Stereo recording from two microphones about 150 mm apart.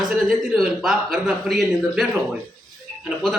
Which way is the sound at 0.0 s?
Centre (ahead or behind).